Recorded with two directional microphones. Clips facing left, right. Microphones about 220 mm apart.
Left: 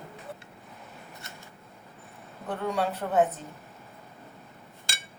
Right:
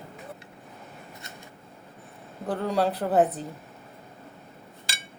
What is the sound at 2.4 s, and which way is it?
Speech, 35° right (ahead or behind).